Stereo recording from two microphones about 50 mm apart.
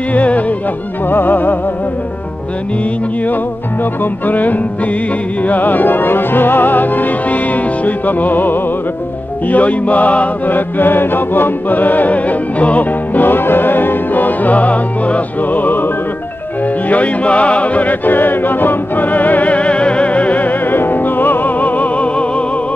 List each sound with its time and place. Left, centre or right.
0.1 s music: left
1.1 s music: left
4.0 s music: left
10.8 s music: left
16.9 s music: left
20.7 s music: left